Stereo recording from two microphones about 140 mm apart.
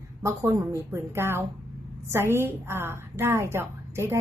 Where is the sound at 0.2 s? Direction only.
20° right (ahead or behind).